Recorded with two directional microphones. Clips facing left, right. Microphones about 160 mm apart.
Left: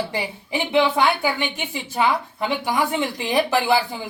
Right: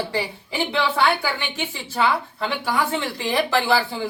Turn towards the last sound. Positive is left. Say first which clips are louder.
# left 1 dB
turn(degrees=15)  # may be behind; listen again after turning